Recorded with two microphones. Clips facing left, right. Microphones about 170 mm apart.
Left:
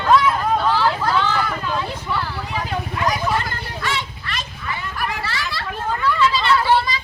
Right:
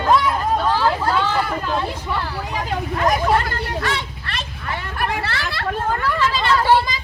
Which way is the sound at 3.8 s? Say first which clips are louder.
Right 1 dB; 60° right (ahead or behind).